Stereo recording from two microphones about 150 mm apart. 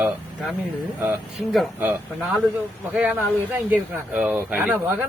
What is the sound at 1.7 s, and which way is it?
A man's voice, 15° right (ahead or behind).